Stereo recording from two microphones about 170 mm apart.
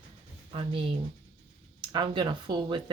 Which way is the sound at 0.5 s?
30° right (ahead or behind).